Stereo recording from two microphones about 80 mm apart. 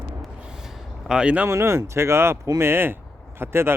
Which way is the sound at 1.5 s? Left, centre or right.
Right.